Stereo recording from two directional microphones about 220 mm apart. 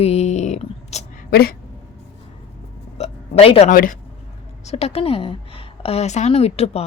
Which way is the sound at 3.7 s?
40° left (ahead or behind).